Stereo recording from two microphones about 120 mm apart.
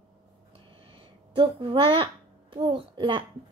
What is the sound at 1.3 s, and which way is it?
Speech, 45° right (ahead or behind).